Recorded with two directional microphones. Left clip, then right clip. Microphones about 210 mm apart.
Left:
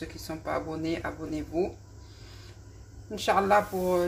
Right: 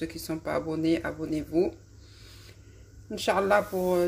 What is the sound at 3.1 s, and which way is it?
Speech, 30° right (ahead or behind).